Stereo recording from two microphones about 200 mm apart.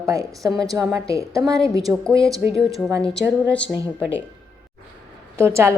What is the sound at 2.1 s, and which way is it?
A woman's voice, centre (ahead or behind).